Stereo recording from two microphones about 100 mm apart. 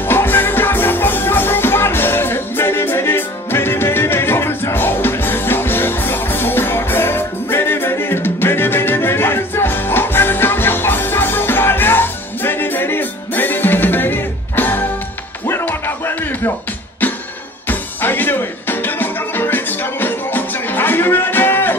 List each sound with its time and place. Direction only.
0.0 s music: 20° left (ahead or behind)
17.6 s music: 20° left (ahead or behind)